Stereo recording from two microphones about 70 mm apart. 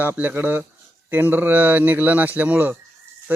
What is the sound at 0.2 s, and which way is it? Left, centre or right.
Speech, right.